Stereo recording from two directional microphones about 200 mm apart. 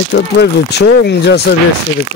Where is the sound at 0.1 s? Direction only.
55° left (ahead or behind).